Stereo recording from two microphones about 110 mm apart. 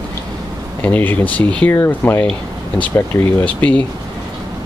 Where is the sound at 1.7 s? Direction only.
25° left (ahead or behind).